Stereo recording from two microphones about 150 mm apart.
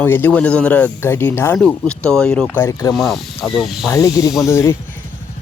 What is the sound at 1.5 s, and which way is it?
Speech, 5° left (ahead or behind).